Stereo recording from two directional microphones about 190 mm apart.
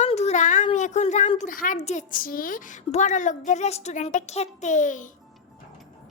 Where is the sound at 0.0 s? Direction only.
35° left (ahead or behind).